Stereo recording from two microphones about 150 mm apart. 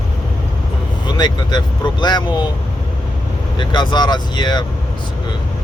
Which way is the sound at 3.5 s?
30° left (ahead or behind).